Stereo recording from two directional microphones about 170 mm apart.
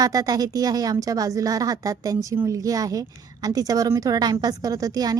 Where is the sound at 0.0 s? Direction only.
20° right (ahead or behind).